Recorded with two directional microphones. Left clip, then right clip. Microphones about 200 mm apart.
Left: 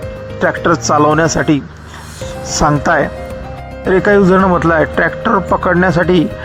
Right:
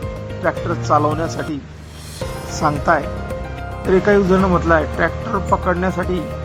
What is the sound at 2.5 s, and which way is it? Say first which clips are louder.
Speech: left 5 dB; 35° left (ahead or behind).